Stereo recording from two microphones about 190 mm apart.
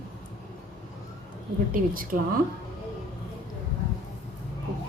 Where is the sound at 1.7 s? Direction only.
50° right (ahead or behind).